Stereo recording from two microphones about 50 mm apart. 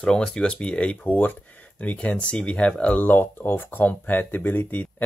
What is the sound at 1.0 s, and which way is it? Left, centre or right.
Speech, left.